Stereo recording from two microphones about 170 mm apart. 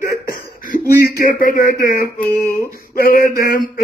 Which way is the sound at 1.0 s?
60° left (ahead or behind).